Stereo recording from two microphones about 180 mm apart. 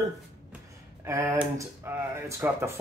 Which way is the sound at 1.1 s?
15° right (ahead or behind).